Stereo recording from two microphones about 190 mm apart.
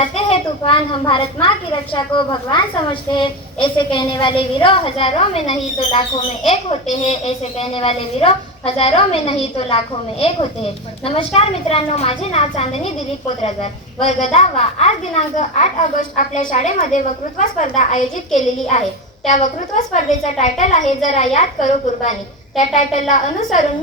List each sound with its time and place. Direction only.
0.0 s a woman's voice: 30° left (ahead or behind)